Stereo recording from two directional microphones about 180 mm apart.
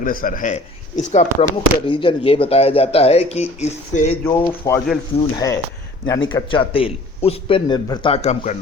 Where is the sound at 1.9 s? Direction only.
30° left (ahead or behind).